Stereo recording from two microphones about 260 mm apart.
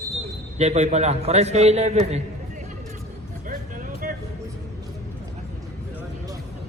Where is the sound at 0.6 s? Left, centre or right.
Right.